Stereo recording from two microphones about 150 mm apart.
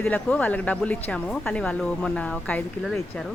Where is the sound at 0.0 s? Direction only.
10° left (ahead or behind).